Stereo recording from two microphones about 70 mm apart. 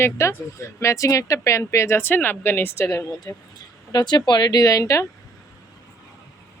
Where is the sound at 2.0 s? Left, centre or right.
Left.